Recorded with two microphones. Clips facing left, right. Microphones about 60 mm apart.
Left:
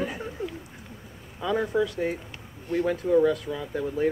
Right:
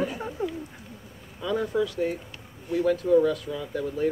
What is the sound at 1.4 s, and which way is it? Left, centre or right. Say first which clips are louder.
Speech: left 1 dB; centre.